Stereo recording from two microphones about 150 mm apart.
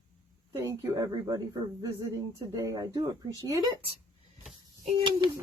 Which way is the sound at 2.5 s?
25° right (ahead or behind).